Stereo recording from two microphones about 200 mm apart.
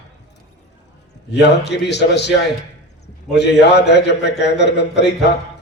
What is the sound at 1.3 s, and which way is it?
A man's voice, 60° left (ahead or behind).